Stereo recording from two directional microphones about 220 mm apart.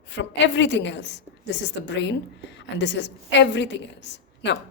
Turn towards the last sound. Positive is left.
turn(degrees=50)  # may be behind; listen again after turning